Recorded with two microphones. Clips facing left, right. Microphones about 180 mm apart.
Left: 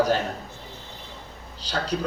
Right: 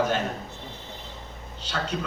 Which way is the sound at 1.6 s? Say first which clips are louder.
Left 3 dB; 35° left (ahead or behind).